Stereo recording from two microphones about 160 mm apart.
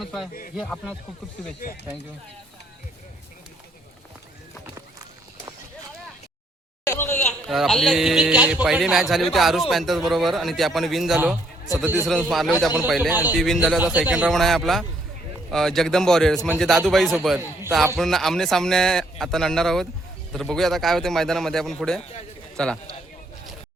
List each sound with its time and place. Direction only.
0.0 s speech: centre (ahead or behind)
1.6 s speech: 60° left (ahead or behind)
6.8 s a sound: 15° left (ahead or behind)
7.4 s a man's voice: centre (ahead or behind)
13.3 s a man's voice: centre (ahead or behind)